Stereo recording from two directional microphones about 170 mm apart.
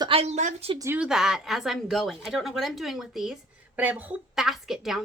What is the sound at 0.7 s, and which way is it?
Speech, 15° right (ahead or behind).